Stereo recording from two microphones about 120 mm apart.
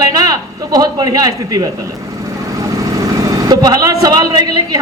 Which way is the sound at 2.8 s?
25° right (ahead or behind).